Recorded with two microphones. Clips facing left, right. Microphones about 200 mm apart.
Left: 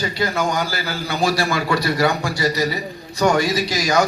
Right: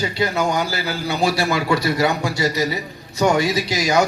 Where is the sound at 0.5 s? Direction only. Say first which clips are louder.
Right 1 dB; 20° right (ahead or behind).